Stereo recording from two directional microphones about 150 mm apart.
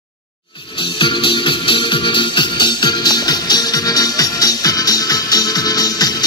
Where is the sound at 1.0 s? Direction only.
35° left (ahead or behind).